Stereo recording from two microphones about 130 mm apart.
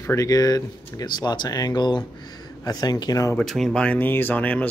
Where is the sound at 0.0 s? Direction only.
25° left (ahead or behind).